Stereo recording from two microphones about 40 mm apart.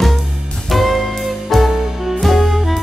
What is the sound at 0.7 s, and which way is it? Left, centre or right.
Music, centre.